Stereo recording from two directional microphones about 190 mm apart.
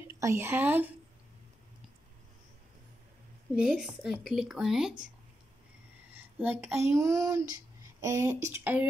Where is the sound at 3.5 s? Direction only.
Centre (ahead or behind).